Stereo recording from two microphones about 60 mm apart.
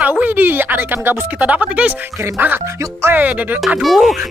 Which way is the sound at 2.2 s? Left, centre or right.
Right.